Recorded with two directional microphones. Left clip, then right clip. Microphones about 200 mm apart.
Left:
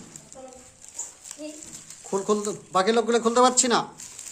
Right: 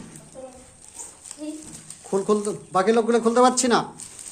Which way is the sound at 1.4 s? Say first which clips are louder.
Right 4 dB; 50° left (ahead or behind).